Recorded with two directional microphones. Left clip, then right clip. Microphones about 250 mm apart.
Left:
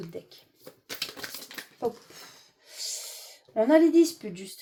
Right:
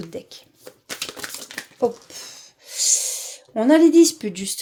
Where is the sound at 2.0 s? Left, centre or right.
Right.